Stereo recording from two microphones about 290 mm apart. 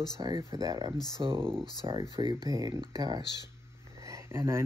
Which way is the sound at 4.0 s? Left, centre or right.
Centre.